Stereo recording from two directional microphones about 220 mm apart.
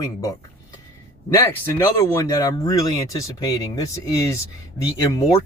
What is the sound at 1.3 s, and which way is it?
Speech, 10° left (ahead or behind).